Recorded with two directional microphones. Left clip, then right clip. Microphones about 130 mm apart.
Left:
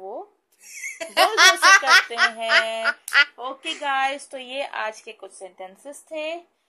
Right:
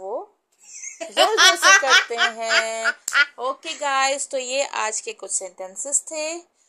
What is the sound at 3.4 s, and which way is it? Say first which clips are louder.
Speech: right 3 dB; 65° right (ahead or behind).